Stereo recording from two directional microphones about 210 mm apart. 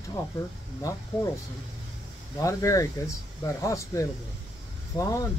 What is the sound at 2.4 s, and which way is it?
Speech, 15° left (ahead or behind).